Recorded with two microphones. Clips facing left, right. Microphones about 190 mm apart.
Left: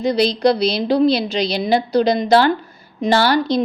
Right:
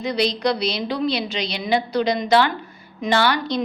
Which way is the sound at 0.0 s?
35° left (ahead or behind).